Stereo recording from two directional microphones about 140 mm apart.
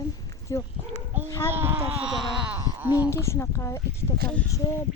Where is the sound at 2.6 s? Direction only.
20° right (ahead or behind).